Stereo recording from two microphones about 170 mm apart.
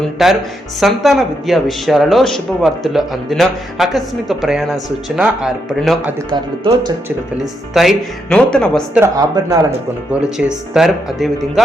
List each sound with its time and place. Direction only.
0.0 s speech: centre (ahead or behind)
6.3 s speech: 25° right (ahead or behind)
7.7 s speech: centre (ahead or behind)
9.0 s speech: 20° right (ahead or behind)
10.1 s speech: 5° right (ahead or behind)